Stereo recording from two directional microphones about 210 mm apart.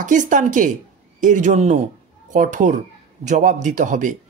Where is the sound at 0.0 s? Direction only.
35° right (ahead or behind).